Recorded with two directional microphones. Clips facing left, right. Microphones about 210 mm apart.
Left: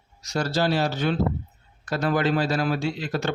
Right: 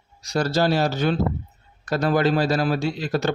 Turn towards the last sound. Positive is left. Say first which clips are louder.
# right 3 dB
turn(degrees=-40)  # may be behind; listen again after turning